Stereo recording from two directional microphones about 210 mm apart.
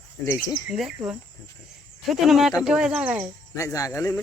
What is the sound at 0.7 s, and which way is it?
Speech, 5° right (ahead or behind).